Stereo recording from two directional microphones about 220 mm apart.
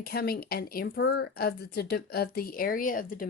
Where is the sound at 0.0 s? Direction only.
45° left (ahead or behind).